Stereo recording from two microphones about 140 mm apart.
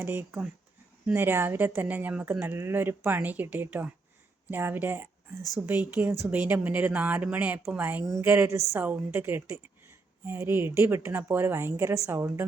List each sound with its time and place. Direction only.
0.0 s a woman's voice: 15° right (ahead or behind)